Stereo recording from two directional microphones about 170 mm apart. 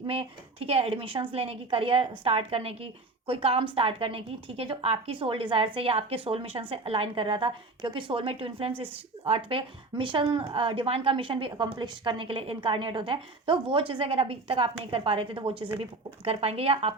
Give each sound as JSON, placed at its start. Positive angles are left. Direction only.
{"t": 0.1, "sound": "speech", "side_deg": -35}